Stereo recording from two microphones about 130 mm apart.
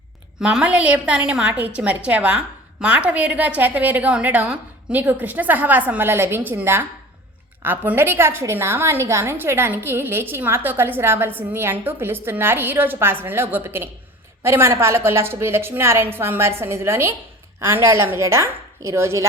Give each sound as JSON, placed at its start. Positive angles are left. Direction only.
{"t": 0.3, "sound": "a woman's voice", "side_deg": -5}